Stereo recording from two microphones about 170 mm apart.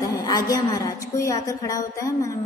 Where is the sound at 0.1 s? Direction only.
20° left (ahead or behind).